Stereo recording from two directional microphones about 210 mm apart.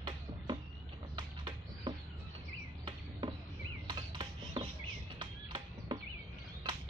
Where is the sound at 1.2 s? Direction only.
20° right (ahead or behind).